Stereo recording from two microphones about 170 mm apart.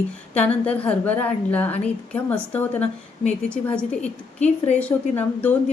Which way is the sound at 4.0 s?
40° left (ahead or behind).